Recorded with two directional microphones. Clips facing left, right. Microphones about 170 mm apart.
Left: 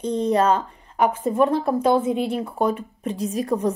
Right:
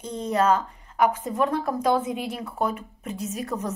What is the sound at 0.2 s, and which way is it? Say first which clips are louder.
Speech: left 2 dB; 30° left (ahead or behind).